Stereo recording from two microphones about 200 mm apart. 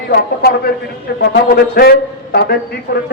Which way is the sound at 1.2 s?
50° left (ahead or behind).